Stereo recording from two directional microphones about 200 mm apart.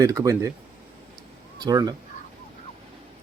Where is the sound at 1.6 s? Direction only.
20° right (ahead or behind).